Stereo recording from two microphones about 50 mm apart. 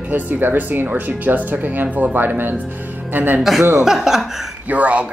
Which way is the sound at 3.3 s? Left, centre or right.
Centre.